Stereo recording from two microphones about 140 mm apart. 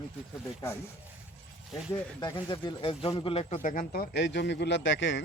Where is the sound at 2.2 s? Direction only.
35° left (ahead or behind).